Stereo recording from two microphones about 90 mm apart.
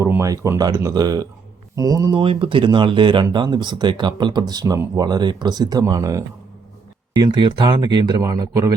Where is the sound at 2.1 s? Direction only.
70° right (ahead or behind); by 6.2 s 40° right (ahead or behind).